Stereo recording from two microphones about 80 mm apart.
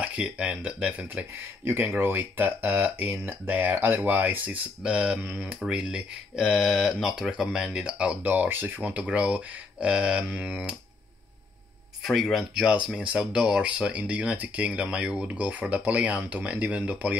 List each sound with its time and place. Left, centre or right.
0.0 s speech: centre
12.0 s speech: centre
12.7 s speech: centre